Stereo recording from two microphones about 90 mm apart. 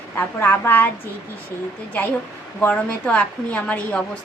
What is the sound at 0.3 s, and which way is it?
Speech, 25° left (ahead or behind).